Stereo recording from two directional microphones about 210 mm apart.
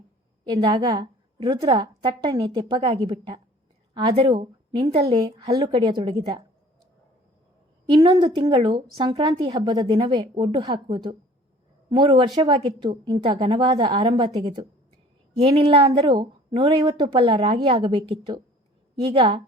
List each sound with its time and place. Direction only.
0.4 s speech: 20° right (ahead or behind)
7.9 s speech: 20° right (ahead or behind)